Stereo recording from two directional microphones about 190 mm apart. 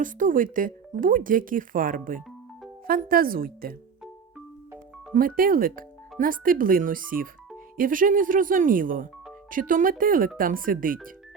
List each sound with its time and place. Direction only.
0.0 s speech: 45° right (ahead or behind)
5.1 s speech: 50° right (ahead or behind)